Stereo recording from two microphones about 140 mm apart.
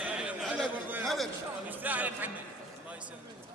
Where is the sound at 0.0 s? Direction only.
10° right (ahead or behind).